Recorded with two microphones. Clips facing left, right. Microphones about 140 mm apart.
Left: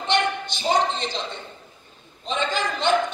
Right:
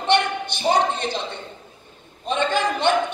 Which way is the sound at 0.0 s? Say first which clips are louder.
Right 3 dB; 60° right (ahead or behind).